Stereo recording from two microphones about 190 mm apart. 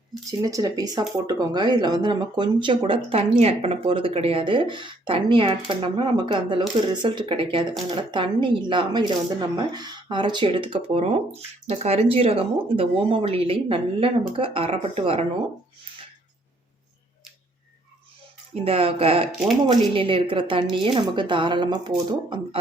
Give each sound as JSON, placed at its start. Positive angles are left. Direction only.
{"t": 0.3, "sound": "speech", "side_deg": -20}
{"t": 18.6, "sound": "speech", "side_deg": -30}